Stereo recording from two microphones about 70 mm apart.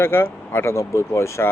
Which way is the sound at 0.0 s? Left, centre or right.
Left.